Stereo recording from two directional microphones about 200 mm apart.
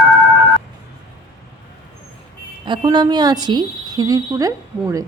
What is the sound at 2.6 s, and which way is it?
A woman's voice, 20° right (ahead or behind).